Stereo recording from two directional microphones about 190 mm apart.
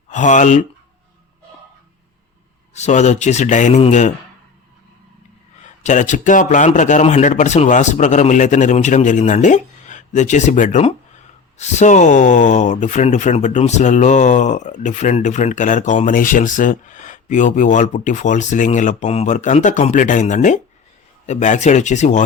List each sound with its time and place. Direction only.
0.1 s speech: 40° left (ahead or behind)
2.7 s speech: 35° left (ahead or behind)
5.6 s speech: 40° left (ahead or behind)